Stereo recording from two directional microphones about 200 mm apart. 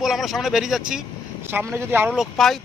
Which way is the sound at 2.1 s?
Centre (ahead or behind).